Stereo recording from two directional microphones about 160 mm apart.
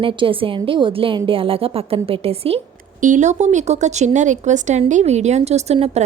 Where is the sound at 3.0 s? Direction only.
50° right (ahead or behind).